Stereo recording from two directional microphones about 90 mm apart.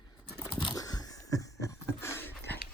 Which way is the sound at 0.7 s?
45° left (ahead or behind).